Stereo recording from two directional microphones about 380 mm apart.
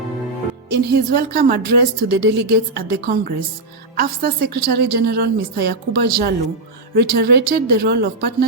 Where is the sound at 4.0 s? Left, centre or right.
Right.